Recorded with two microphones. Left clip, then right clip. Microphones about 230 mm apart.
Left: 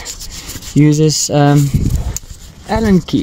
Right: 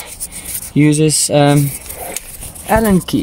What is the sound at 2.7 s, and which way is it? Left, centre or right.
Speech, centre.